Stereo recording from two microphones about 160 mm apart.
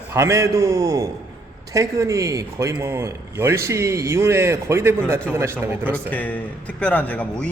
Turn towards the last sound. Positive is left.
turn(degrees=10)  # may be behind; listen again after turning